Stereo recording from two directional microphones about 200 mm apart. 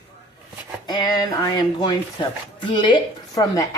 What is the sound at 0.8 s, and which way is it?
A woman's voice, 20° left (ahead or behind).